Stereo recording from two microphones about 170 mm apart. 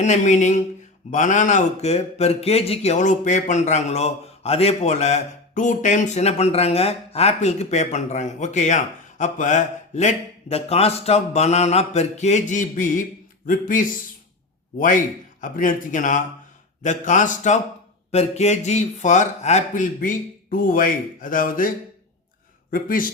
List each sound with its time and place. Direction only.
0.0 s speech: 45° left (ahead or behind)
22.7 s speech: 55° left (ahead or behind)